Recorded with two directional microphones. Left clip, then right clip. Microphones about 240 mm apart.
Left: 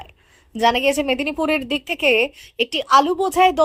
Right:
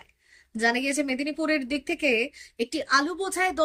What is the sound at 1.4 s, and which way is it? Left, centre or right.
Speech, left.